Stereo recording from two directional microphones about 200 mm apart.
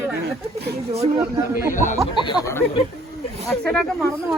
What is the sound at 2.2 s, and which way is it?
Speech, 15° left (ahead or behind).